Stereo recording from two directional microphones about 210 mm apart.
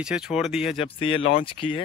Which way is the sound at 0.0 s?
5° right (ahead or behind).